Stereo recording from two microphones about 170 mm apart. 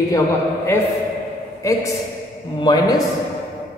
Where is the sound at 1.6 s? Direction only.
20° left (ahead or behind).